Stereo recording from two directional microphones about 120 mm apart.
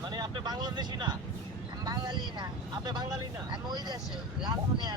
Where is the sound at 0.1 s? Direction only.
35° right (ahead or behind).